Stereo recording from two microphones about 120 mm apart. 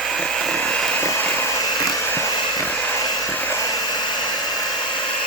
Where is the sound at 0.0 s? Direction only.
5° left (ahead or behind).